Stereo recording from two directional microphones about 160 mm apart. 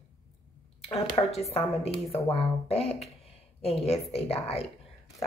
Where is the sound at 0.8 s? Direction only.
40° left (ahead or behind).